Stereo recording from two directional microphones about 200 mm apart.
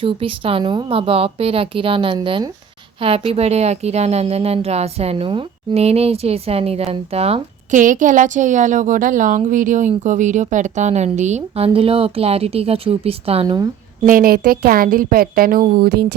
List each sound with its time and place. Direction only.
0.0 s a woman's voice: 25° right (ahead or behind)
14.0 s a woman's voice: 45° right (ahead or behind)